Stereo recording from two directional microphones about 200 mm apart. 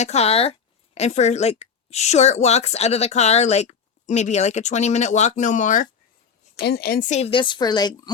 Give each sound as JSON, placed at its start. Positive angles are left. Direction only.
{"t": 0.0, "sound": "a woman's voice", "side_deg": 30}
{"t": 6.6, "sound": "a woman's voice", "side_deg": 50}
{"t": 7.2, "sound": "a woman's voice", "side_deg": 25}